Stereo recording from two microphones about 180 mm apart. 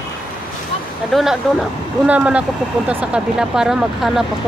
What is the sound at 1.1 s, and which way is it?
Speech, centre (ahead or behind).